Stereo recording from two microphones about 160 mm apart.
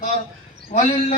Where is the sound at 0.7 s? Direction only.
45° left (ahead or behind).